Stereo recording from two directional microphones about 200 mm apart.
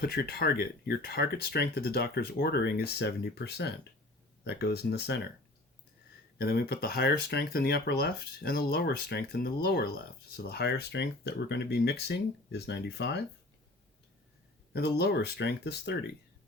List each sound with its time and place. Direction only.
0.0 s speech: 50° left (ahead or behind)
6.4 s speech: 50° left (ahead or behind)
14.7 s speech: 50° left (ahead or behind)